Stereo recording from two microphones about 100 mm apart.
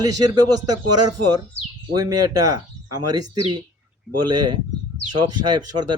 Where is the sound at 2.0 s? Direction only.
35° right (ahead or behind).